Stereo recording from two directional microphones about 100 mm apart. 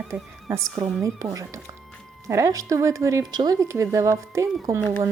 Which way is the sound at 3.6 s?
30° right (ahead or behind).